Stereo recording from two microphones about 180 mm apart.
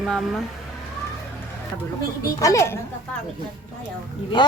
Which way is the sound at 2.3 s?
20° left (ahead or behind).